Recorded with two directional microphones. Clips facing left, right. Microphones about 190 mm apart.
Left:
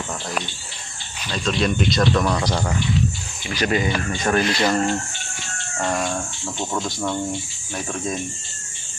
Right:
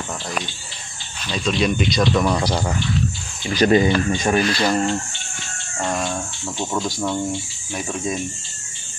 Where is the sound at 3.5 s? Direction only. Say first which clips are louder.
Right 6 dB; 35° right (ahead or behind).